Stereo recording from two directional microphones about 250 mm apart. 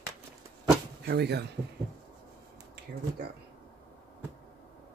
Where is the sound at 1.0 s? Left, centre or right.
Right.